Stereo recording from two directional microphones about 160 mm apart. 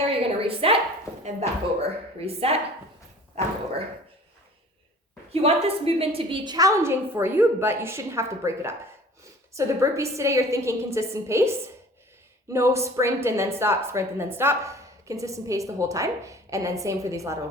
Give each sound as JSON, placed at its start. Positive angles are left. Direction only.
{"t": 0.0, "sound": "a sound", "side_deg": -35}
{"t": 1.2, "sound": "a woman's voice", "side_deg": -40}
{"t": 5.3, "sound": "a woman's voice", "side_deg": -40}
{"t": 12.5, "sound": "a woman's voice", "side_deg": -20}